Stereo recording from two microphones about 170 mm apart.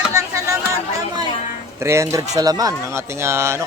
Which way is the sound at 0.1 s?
20° right (ahead or behind).